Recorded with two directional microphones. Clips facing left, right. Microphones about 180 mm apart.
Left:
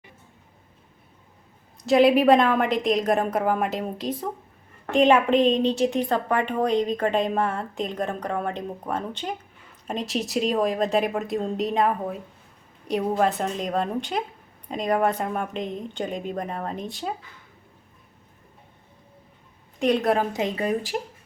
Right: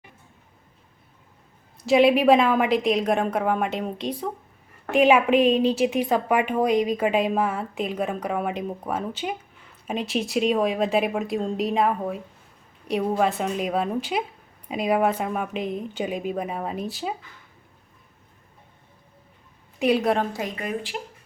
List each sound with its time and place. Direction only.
1.8 s a woman's voice: centre (ahead or behind)
19.8 s a woman's voice: 5° right (ahead or behind)
20.3 s a woman's voice: 25° left (ahead or behind)
20.9 s speech: 40° left (ahead or behind)